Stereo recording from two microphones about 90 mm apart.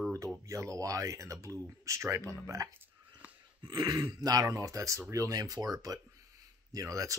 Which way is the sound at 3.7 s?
50° right (ahead or behind).